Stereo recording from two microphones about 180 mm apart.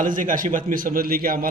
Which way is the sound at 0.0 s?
45° right (ahead or behind).